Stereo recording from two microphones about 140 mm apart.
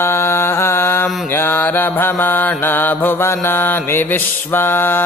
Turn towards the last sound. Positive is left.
turn(degrees=15)  # may be behind; listen again after turning